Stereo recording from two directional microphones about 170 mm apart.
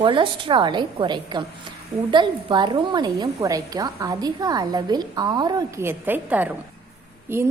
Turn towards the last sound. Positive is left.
turn(degrees=-15)  # may be behind; listen again after turning